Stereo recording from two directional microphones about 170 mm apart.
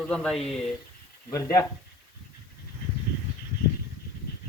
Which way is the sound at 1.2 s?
20° left (ahead or behind).